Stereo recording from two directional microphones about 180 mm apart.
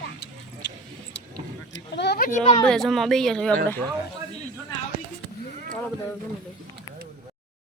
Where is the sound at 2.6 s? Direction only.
Centre (ahead or behind).